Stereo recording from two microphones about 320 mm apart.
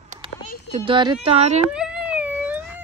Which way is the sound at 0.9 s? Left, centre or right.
Centre.